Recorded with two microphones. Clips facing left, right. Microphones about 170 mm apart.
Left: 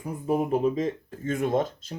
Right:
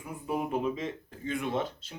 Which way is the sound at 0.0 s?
40° left (ahead or behind).